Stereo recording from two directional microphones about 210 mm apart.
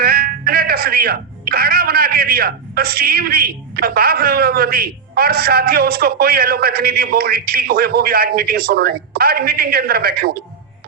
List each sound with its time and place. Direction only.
0.0 s speech: 45° right (ahead or behind)